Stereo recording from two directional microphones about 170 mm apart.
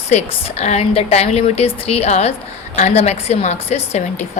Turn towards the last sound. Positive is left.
turn(degrees=40)  # may be behind; listen again after turning